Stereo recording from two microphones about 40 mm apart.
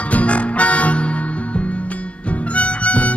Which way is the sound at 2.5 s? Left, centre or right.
Left.